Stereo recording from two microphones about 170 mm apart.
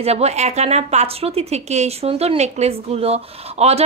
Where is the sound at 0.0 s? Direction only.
40° right (ahead or behind).